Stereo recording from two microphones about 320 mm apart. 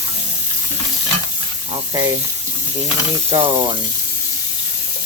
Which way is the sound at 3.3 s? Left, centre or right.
Centre.